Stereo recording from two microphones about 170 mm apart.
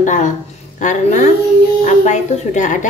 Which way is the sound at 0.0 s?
50° left (ahead or behind).